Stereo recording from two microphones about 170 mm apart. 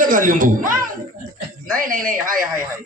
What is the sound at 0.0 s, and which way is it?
A man's voice, 55° right (ahead or behind).